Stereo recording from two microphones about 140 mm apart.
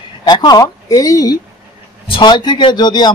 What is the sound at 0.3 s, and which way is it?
A woman's voice, 30° left (ahead or behind).